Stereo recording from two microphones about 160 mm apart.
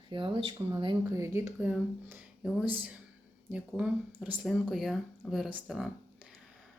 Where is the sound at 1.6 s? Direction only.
10° right (ahead or behind).